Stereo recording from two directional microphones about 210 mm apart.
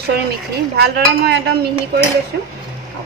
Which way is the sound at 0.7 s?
50° right (ahead or behind).